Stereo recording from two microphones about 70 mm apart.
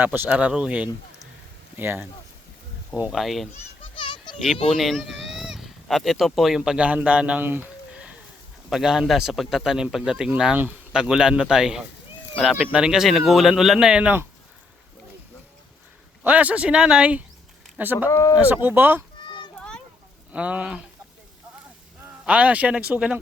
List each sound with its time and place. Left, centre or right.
0.0 s speech: right
0.3 s speech: centre
1.7 s speech: right
3.1 s speech: centre
6.6 s a man's voice: centre
7.4 s speech: right
8.7 s a man's voice: centre
16.2 s speech: right
18.1 s speech: left
18.3 s speech: right
20.3 s a man's voice: centre
22.3 s speech: right